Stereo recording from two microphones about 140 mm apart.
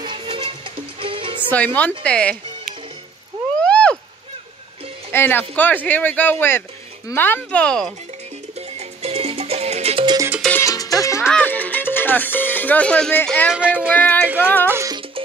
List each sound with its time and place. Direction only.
0.0 s music: 35° right (ahead or behind)
1.5 s speech: 10° left (ahead or behind)
3.6 s a sound: 10° left (ahead or behind)
5.1 s speech: 15° left (ahead or behind)
8.5 s music: 45° right (ahead or behind)
10.0 s music: 25° right (ahead or behind)
10.6 s music: 25° left (ahead or behind)
11.3 s speech: 10° left (ahead or behind)
13.5 s speech: 10° right (ahead or behind)
13.9 s speech: 15° left (ahead or behind)
14.2 s speech: 10° right (ahead or behind)
14.7 s music: 20° right (ahead or behind)